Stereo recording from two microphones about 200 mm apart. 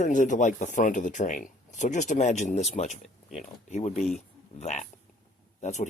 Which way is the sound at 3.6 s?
35° left (ahead or behind).